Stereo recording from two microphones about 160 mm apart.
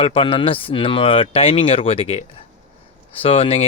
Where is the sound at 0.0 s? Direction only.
35° left (ahead or behind).